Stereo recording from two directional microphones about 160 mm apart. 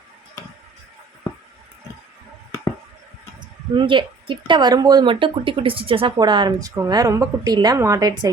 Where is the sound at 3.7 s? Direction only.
30° right (ahead or behind).